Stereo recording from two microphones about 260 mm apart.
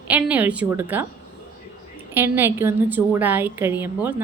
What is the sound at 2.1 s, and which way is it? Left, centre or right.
A woman's voice, centre.